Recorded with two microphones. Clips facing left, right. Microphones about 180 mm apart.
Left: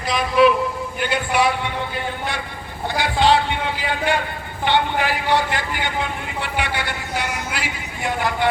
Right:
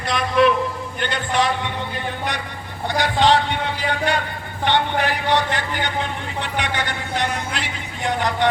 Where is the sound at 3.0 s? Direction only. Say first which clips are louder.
Even; 15° right (ahead or behind).